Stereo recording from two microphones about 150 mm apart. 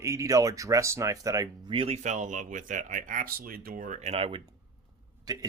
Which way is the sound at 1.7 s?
40° right (ahead or behind).